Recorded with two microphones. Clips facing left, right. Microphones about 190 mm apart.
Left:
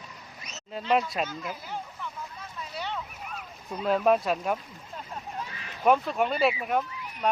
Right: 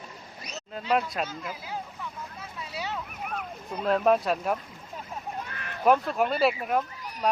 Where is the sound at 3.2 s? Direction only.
55° right (ahead or behind).